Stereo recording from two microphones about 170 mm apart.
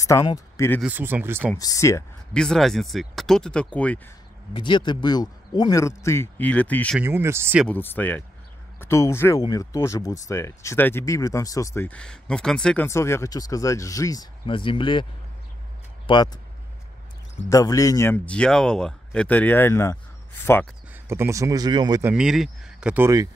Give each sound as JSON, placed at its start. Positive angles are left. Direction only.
{"t": 0.0, "sound": "speech", "side_deg": 20}
{"t": 0.8, "sound": "speech", "side_deg": -10}
{"t": 1.6, "sound": "speech", "side_deg": 20}
{"t": 2.3, "sound": "speech", "side_deg": 5}
{"t": 4.6, "sound": "speech", "side_deg": 25}
{"t": 7.0, "sound": "speech", "side_deg": -15}
{"t": 7.6, "sound": "speech", "side_deg": 10}
{"t": 12.8, "sound": "speech", "side_deg": 15}
{"t": 16.1, "sound": "speech", "side_deg": 30}
{"t": 17.5, "sound": "speech", "side_deg": 20}
{"t": 20.9, "sound": "speech", "side_deg": -15}
{"t": 22.0, "sound": "speech", "side_deg": -5}